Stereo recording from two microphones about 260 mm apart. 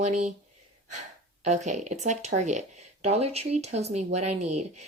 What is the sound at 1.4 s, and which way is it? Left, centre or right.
Speech, right.